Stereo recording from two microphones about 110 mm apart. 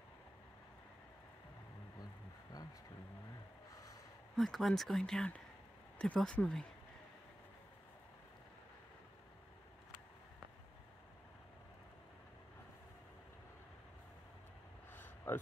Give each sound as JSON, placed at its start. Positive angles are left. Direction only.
{"t": 4.4, "sound": "speech", "side_deg": 0}
{"t": 14.9, "sound": "vehicle", "side_deg": 20}